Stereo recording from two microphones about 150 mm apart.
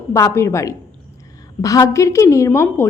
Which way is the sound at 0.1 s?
20° left (ahead or behind).